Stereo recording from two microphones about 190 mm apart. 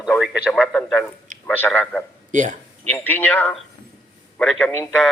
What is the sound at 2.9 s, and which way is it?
A man's voice, 10° left (ahead or behind).